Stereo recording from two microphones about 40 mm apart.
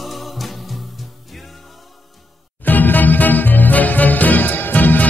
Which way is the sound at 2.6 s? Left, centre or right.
Left.